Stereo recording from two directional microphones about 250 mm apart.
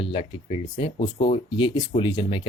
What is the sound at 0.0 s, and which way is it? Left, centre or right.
Speech, left.